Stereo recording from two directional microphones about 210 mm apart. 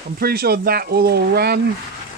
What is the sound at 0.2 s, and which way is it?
Speech, 45° right (ahead or behind).